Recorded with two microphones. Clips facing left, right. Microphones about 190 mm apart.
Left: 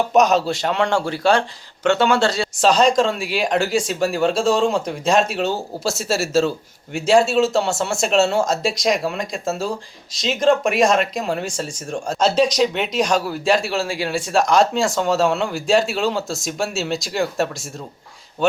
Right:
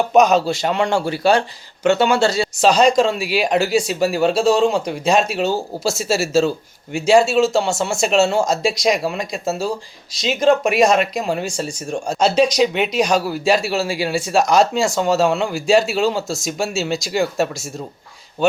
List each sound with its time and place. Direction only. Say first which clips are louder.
0.1 s speech: right 4 dB; centre (ahead or behind)